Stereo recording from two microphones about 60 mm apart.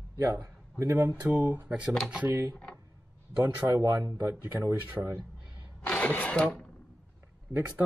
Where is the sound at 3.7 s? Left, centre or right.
Right.